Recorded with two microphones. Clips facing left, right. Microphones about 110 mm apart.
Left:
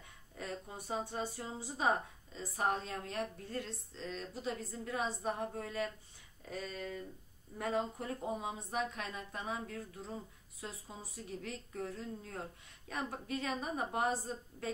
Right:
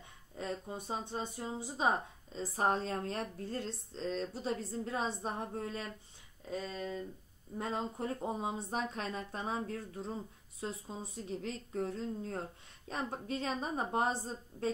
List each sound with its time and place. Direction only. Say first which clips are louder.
0.4 s speech: right 4 dB; 25° right (ahead or behind)
2.3 s a woman's voice: right 3 dB; 35° right (ahead or behind)